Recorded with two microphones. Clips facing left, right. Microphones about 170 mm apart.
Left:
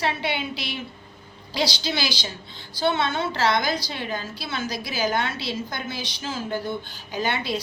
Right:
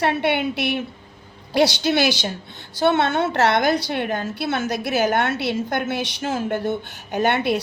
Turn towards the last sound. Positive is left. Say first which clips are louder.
# right 7 dB
turn(degrees=-60)  # may be behind; listen again after turning